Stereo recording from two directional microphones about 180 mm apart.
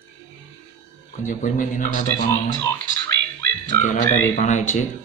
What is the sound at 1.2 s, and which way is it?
A man's voice, 45° left (ahead or behind).